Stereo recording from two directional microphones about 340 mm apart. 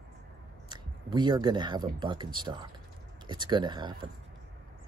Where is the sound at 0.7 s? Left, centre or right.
Centre.